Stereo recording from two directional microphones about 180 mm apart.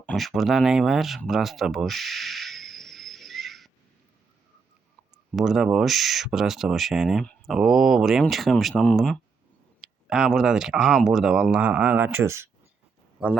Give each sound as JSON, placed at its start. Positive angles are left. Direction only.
{"t": 0.0, "sound": "speech", "side_deg": 5}
{"t": 5.3, "sound": "a man's voice", "side_deg": 0}